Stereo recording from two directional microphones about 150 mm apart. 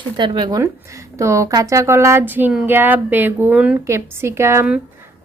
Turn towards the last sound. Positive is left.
turn(degrees=-15)  # may be behind; listen again after turning